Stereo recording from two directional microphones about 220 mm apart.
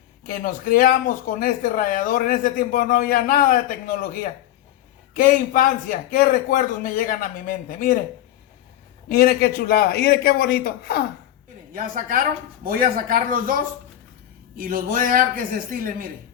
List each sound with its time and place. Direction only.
0.3 s speech: 40° left (ahead or behind)
9.0 s a man's voice: 40° left (ahead or behind)
11.7 s speech: 35° right (ahead or behind)